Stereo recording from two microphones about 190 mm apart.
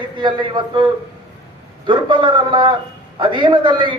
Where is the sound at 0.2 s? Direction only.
25° right (ahead or behind).